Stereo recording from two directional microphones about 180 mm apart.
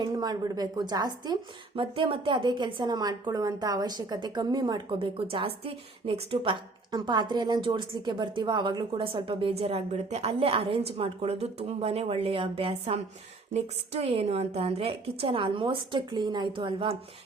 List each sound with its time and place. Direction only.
0.0 s a woman's voice: 20° right (ahead or behind)